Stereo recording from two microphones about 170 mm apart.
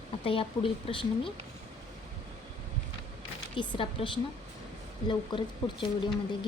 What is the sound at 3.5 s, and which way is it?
Speech, 30° left (ahead or behind).